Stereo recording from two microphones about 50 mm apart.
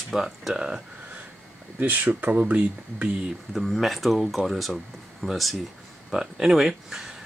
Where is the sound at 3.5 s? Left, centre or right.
Centre.